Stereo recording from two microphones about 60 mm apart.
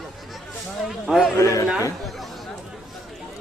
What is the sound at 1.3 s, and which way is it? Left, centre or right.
Speech, left.